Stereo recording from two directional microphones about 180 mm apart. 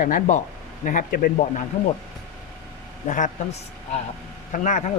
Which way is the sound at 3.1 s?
40° left (ahead or behind).